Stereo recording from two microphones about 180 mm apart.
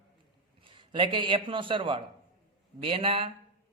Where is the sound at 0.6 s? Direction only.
30° right (ahead or behind).